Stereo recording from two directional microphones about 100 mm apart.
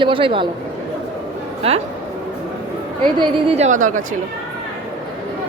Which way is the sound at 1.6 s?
75° right (ahead or behind).